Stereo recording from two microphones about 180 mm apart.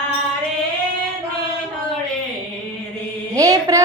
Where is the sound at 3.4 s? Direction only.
20° right (ahead or behind).